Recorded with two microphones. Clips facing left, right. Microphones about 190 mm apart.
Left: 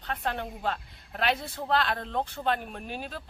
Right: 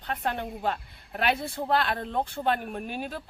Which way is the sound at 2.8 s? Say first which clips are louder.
Right 3 dB; 50° right (ahead or behind).